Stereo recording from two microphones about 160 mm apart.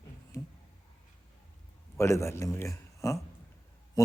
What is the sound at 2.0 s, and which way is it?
A man's voice, 15° left (ahead or behind).